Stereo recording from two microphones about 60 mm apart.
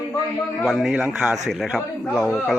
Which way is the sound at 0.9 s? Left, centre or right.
Centre.